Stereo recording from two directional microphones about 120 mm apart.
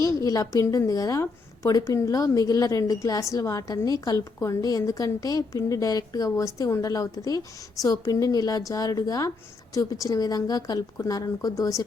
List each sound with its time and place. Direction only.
0.0 s a woman's voice: 30° left (ahead or behind)